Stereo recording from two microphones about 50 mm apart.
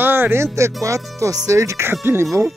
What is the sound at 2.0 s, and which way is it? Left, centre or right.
Speech, right.